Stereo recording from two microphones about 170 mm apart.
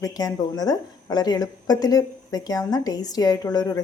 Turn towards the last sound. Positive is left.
turn(degrees=20)  # may be behind; listen again after turning